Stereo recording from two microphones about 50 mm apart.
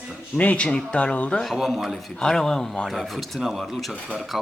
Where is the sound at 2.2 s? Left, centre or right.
Centre.